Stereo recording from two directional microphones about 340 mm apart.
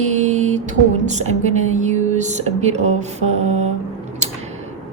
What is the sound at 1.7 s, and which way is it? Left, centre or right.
Speech, right.